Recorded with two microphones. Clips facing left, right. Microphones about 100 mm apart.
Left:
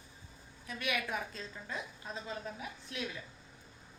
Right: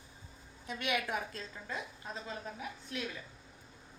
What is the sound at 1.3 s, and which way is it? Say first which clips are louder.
Speech: right 1 dB; centre (ahead or behind).